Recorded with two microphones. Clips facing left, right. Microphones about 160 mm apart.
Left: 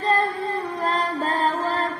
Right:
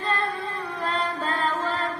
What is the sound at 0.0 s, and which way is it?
Music, 40° left (ahead or behind).